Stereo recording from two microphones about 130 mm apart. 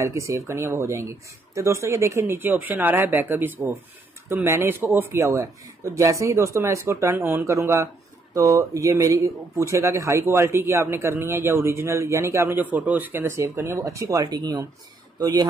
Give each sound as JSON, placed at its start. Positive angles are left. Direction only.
{"t": 0.0, "sound": "speech", "side_deg": -25}